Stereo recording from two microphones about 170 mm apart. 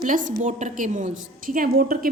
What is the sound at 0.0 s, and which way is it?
A woman's voice, 50° right (ahead or behind).